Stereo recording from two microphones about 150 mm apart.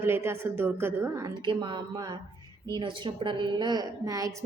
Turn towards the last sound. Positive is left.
turn(degrees=-20)  # may be behind; listen again after turning